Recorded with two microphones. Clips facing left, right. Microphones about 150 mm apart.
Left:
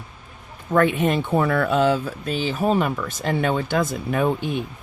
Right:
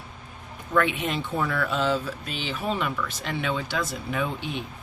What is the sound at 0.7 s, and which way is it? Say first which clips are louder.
Speech: left 6 dB; 45° left (ahead or behind).